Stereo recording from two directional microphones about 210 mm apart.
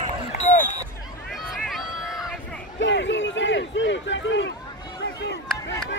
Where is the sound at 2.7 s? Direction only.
60° left (ahead or behind).